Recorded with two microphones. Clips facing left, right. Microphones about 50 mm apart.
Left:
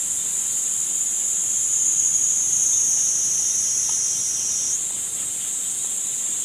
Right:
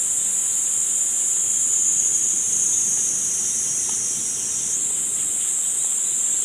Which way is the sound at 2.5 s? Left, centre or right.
Centre.